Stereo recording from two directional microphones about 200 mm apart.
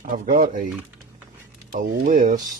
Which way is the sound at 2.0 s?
45° right (ahead or behind).